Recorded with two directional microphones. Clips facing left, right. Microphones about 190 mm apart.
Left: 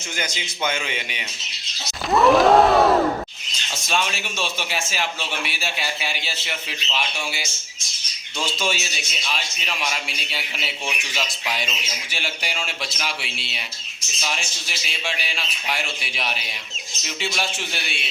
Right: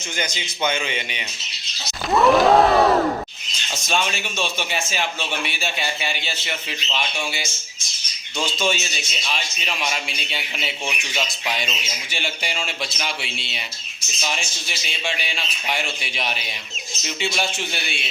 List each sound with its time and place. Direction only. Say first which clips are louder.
0.2 s a man's voice: right 2 dB; 5° left (ahead or behind)
2.0 s a sound: even; centre (ahead or behind)
3.8 s a man's voice: right 1 dB; centre (ahead or behind)